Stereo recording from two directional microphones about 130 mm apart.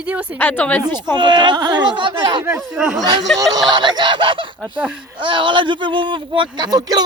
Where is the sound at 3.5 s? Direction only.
35° right (ahead or behind).